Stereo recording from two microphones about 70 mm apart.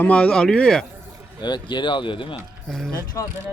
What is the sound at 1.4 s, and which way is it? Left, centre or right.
Speech, left.